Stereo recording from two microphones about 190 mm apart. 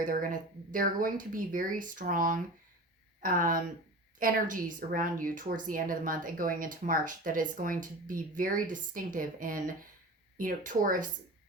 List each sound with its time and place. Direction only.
0.0 s a woman's voice: 45° right (ahead or behind)